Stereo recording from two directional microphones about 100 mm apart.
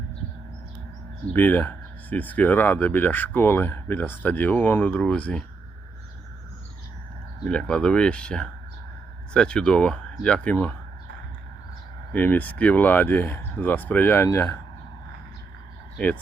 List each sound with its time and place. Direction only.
1.3 s speech: 20° left (ahead or behind)
7.4 s speech: 10° left (ahead or behind)
12.1 s speech: 20° left (ahead or behind)
16.0 s speech: 10° left (ahead or behind)